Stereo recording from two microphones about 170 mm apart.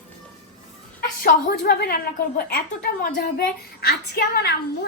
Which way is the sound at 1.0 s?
60° left (ahead or behind).